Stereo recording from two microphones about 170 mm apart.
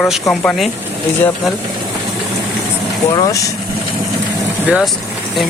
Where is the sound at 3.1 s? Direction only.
20° left (ahead or behind).